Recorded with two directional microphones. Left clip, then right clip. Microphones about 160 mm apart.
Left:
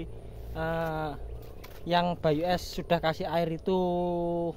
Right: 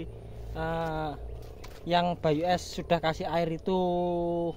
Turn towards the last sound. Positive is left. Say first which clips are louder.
# right 1 dB
turn(degrees=15)  # may be behind; listen again after turning